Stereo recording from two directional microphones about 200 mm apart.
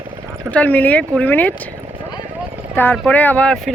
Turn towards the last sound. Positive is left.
turn(degrees=5)  # may be behind; listen again after turning